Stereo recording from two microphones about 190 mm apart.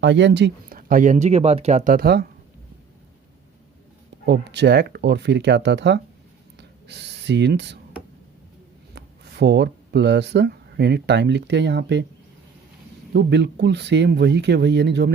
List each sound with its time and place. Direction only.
0.0 s speech: 70° right (ahead or behind); by 2.3 s 55° right (ahead or behind)
4.3 s speech: 65° right (ahead or behind)
9.0 s speech: 60° right (ahead or behind)
13.1 s speech: 65° right (ahead or behind)